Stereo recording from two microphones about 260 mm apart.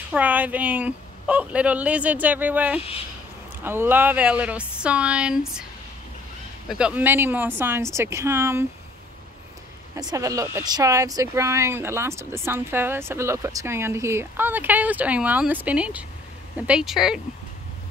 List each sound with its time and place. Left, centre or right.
0.1 s a woman's voice: centre
6.7 s speech: centre
9.9 s a woman's voice: centre